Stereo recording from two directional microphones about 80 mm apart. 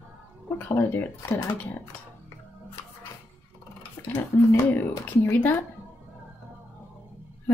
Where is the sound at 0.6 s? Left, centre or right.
Left.